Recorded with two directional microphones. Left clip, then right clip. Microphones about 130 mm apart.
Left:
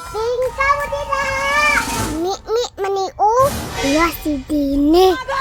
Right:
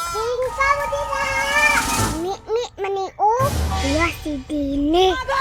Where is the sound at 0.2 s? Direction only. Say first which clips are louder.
Left 4 dB; 5° left (ahead or behind).